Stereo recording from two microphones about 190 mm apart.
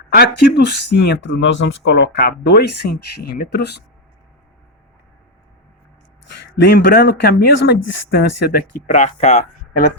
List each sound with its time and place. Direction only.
0.1 s speech: 55° left (ahead or behind)
6.6 s speech: 65° left (ahead or behind)
8.9 s speech: 35° left (ahead or behind)